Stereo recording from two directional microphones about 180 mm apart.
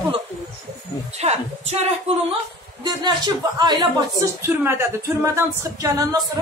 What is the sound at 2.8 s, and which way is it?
A man's voice, 25° right (ahead or behind).